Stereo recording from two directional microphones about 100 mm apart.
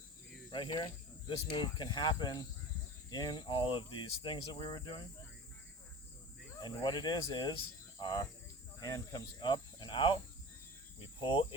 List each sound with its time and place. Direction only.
0.5 s speech: 55° left (ahead or behind)
6.6 s speech: 45° left (ahead or behind)
11.2 s speech: 55° left (ahead or behind)